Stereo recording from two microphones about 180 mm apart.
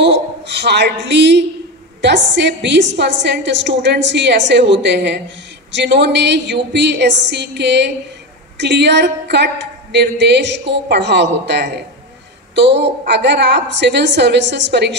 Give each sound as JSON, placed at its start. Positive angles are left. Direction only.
{"t": 0.0, "sound": "a woman's voice", "side_deg": -70}